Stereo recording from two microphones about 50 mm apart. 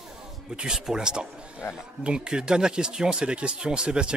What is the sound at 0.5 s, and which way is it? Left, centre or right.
Speech, centre.